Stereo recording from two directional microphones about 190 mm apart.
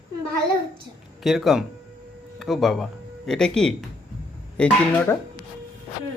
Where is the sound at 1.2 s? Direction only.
Centre (ahead or behind).